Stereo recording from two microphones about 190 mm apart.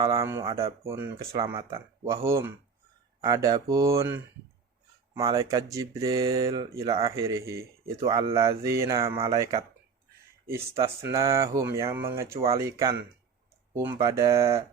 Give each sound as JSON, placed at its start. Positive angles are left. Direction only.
{"t": 0.0, "sound": "speech", "side_deg": -20}